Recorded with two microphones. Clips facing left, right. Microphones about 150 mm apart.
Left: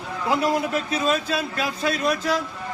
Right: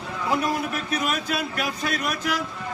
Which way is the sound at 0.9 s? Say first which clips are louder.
Left 2 dB; 25° left (ahead or behind).